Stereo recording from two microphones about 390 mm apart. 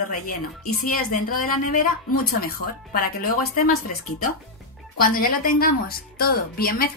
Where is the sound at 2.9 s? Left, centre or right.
Left.